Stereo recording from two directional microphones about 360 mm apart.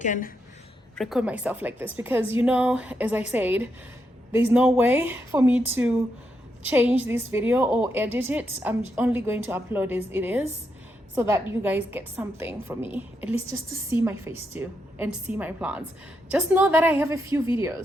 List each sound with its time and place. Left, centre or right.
0.0 s a woman's voice: left
0.9 s a woman's voice: centre